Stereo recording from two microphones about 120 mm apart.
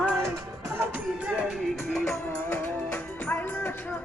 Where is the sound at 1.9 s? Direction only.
5° left (ahead or behind).